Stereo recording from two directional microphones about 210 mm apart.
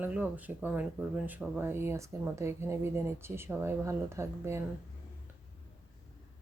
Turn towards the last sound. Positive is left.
turn(degrees=-15)  # may be behind; listen again after turning